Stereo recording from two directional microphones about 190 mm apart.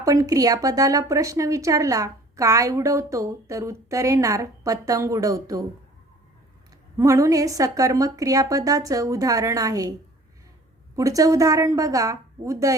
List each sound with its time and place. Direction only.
0.0 s speech: 20° right (ahead or behind)
6.9 s speech: 15° right (ahead or behind)
10.9 s speech: 15° right (ahead or behind)